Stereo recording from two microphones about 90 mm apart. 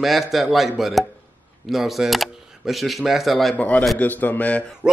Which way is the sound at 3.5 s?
15° left (ahead or behind).